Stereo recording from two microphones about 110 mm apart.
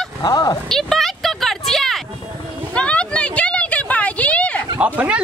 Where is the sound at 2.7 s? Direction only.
10° left (ahead or behind).